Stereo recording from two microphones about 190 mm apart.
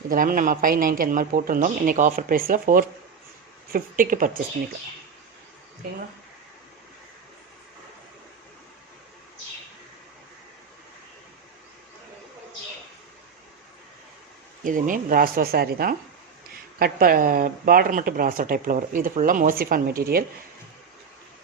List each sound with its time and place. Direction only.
0.1 s speech: 45° right (ahead or behind)
14.6 s speech: 45° right (ahead or behind)